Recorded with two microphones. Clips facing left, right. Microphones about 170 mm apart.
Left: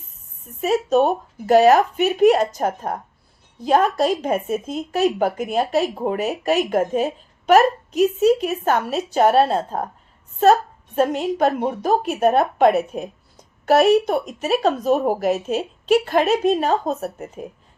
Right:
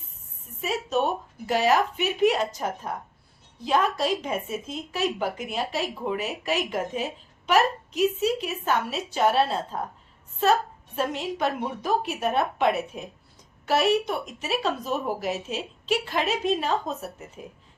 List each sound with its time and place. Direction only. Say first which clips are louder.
0.6 s speech: left 8 dB; 45° left (ahead or behind)
10.9 s speech: left 8 dB; 45° left (ahead or behind)